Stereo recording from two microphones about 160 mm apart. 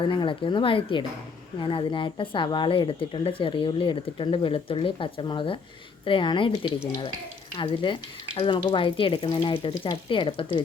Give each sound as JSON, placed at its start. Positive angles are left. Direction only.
{"t": 0.0, "sound": "speech", "side_deg": 30}